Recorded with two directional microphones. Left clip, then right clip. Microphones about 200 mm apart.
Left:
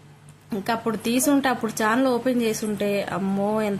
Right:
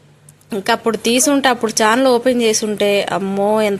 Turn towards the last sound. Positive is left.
turn(degrees=-15)  # may be behind; listen again after turning